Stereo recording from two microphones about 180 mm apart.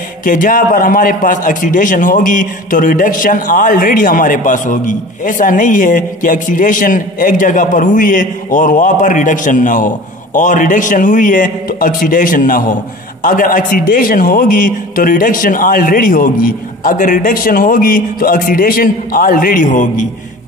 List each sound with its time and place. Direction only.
0.2 s a man's voice: 50° left (ahead or behind)